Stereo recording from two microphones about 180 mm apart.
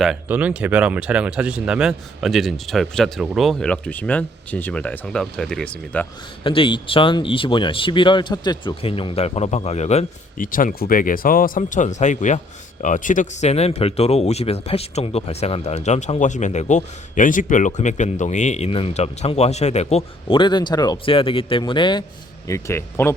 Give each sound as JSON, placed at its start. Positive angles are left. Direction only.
{"t": 0.0, "sound": "speech", "side_deg": -5}
{"t": 6.4, "sound": "speech", "side_deg": 30}
{"t": 10.4, "sound": "speech", "side_deg": 50}